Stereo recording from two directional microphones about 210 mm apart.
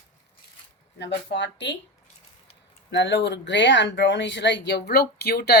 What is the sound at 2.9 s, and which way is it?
Speech, 55° left (ahead or behind).